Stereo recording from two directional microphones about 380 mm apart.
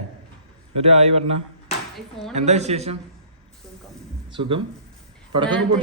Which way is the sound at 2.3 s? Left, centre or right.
Centre.